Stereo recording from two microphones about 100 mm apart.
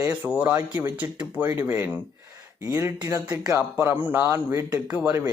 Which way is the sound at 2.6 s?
30° right (ahead or behind).